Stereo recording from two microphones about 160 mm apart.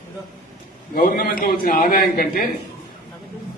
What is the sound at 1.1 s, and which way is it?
A man's voice, 65° left (ahead or behind).